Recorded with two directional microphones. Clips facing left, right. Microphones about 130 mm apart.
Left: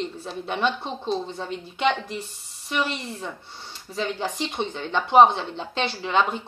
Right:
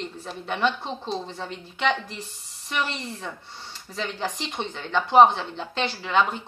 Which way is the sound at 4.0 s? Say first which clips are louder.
Left 3 dB; 20° left (ahead or behind).